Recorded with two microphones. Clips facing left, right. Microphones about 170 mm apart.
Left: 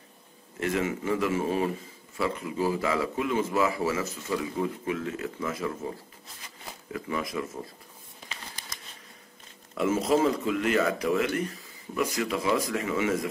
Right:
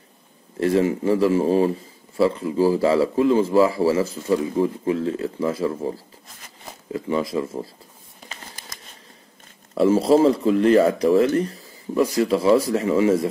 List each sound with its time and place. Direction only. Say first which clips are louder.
0.6 s speech: right 9 dB; 35° right (ahead or behind)
9.8 s speech: right 8 dB; 35° right (ahead or behind)